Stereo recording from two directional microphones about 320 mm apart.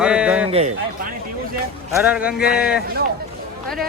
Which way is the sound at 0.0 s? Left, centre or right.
Centre.